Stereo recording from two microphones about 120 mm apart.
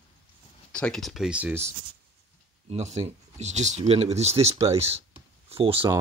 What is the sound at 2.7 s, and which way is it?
Speech, 65° right (ahead or behind).